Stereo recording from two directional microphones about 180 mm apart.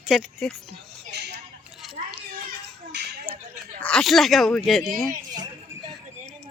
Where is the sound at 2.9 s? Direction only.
60° right (ahead or behind).